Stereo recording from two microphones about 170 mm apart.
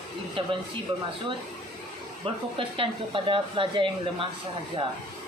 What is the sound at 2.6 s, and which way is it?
Speech, 30° right (ahead or behind).